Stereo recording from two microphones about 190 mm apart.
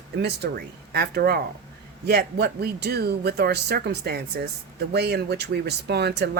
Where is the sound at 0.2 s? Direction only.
60° right (ahead or behind).